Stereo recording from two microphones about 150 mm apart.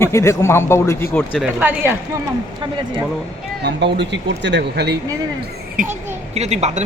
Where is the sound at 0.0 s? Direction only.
20° left (ahead or behind).